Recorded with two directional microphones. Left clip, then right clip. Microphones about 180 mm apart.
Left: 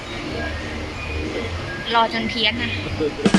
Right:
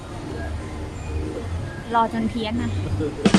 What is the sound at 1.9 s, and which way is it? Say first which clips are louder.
Speech: left 2 dB; 25° right (ahead or behind).